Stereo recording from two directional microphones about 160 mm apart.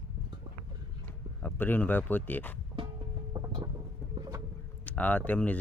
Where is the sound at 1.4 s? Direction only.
10° left (ahead or behind).